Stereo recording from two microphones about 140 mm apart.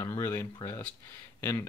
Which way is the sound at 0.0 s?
20° left (ahead or behind).